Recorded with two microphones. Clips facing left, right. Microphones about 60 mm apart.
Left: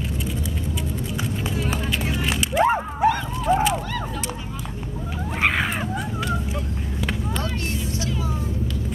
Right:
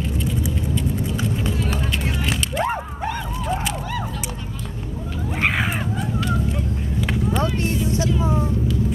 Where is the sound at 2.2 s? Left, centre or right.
Centre.